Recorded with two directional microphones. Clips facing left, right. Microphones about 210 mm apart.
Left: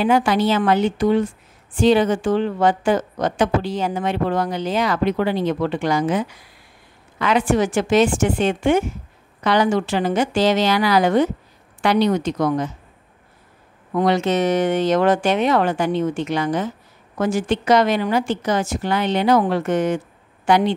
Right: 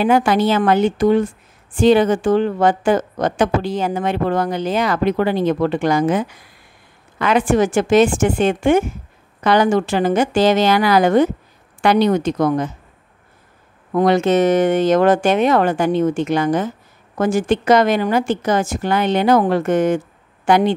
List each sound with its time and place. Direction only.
0.0 s a woman's voice: 50° right (ahead or behind)
13.9 s a woman's voice: 50° right (ahead or behind)